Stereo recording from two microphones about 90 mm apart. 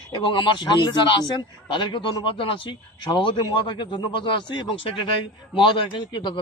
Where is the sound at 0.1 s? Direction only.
60° left (ahead or behind).